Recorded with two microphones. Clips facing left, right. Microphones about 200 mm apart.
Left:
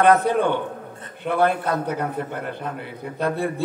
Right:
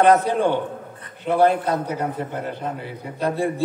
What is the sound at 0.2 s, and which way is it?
A man's voice, 60° left (ahead or behind).